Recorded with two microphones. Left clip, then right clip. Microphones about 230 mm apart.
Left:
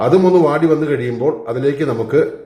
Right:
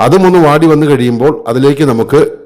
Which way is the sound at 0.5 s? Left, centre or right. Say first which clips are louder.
Right 7 dB; right.